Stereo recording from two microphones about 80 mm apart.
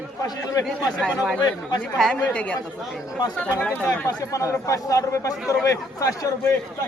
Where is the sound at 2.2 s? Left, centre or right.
Centre.